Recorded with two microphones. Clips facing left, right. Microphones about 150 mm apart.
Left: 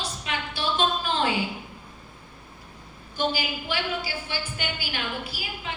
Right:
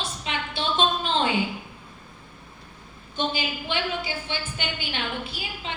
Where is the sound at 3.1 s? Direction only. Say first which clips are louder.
Left 1 dB; 25° right (ahead or behind).